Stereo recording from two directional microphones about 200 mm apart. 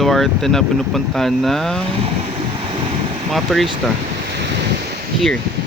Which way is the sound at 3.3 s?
Centre (ahead or behind).